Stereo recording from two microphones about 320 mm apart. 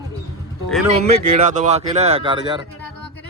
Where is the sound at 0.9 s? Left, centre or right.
Centre.